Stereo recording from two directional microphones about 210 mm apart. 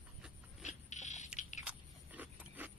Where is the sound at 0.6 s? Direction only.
35° left (ahead or behind).